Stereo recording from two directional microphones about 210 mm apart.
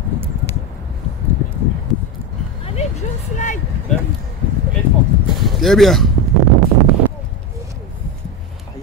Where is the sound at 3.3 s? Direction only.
35° left (ahead or behind).